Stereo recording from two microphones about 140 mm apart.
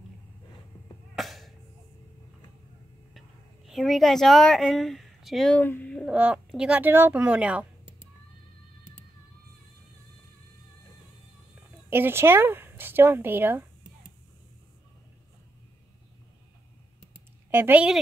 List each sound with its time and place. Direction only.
1.1 s music: centre (ahead or behind)
3.2 s speech: centre (ahead or behind)
5.6 s speech: 15° left (ahead or behind)
6.0 s speech: 10° right (ahead or behind)
11.9 s speech: 15° right (ahead or behind)
17.5 s speech: 15° right (ahead or behind)